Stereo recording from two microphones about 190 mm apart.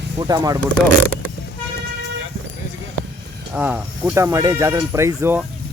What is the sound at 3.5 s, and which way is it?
Speech, 5° right (ahead or behind).